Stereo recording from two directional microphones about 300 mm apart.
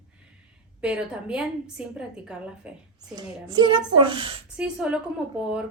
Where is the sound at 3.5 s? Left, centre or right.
Centre.